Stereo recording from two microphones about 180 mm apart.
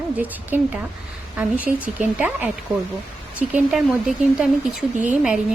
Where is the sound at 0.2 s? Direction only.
10° right (ahead or behind).